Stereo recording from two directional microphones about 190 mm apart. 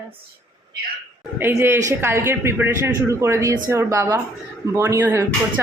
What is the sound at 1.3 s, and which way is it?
Speech, 10° right (ahead or behind).